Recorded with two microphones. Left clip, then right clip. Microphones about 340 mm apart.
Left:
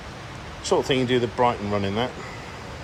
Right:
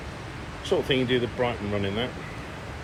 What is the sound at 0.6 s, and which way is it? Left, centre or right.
Speech, centre.